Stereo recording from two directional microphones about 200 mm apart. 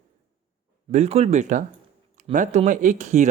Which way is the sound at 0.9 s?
35° right (ahead or behind).